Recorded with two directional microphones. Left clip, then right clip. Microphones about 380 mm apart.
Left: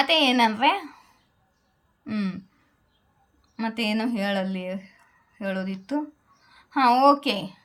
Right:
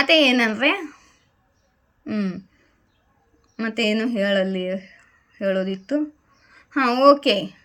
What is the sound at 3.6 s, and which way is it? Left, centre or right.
Speech, centre.